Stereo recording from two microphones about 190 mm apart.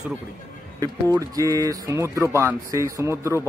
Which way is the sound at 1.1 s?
20° right (ahead or behind).